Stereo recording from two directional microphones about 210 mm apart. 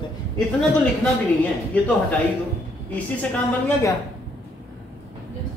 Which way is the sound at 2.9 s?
10° left (ahead or behind).